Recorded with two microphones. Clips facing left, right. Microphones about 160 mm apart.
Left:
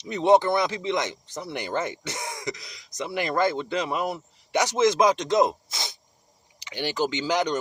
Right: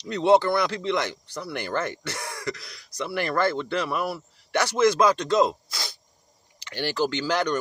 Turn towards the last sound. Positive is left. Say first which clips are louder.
# even
turn(degrees=15)  # may be behind; listen again after turning